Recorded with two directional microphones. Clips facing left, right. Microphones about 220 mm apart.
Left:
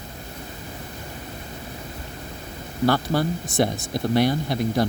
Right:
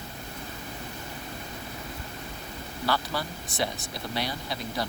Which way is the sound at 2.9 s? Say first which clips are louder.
Left 9 dB; 50° left (ahead or behind).